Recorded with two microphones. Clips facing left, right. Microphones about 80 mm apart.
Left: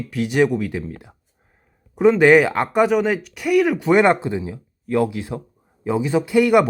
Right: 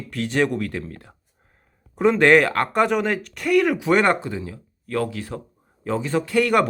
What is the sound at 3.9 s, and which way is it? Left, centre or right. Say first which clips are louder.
Speech: left 4 dB; centre.